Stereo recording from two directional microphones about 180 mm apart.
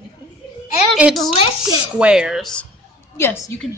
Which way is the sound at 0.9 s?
Centre (ahead or behind).